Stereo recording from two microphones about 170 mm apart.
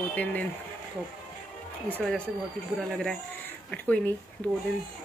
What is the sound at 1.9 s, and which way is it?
Speech, 5° left (ahead or behind).